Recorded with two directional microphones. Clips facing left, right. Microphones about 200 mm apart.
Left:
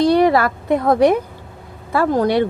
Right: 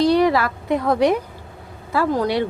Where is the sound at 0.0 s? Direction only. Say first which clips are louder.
Left 3 dB; 50° left (ahead or behind).